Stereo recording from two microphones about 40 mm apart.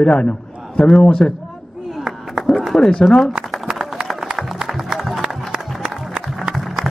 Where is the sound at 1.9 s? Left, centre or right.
Centre.